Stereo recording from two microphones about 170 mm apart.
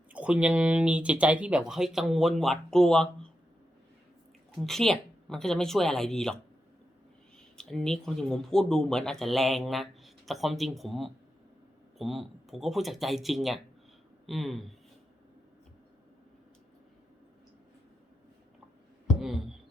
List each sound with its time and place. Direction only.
0.1 s speech: 5° right (ahead or behind)
4.5 s speech: centre (ahead or behind)
7.5 s speech: 5° left (ahead or behind)